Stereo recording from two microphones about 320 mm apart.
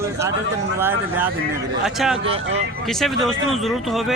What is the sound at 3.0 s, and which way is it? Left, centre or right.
A man's voice, centre.